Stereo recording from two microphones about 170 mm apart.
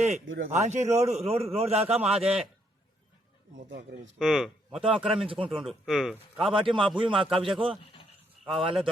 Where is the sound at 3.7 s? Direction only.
90° right.